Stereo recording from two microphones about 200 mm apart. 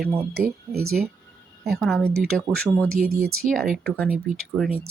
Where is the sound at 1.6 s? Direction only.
5° left (ahead or behind).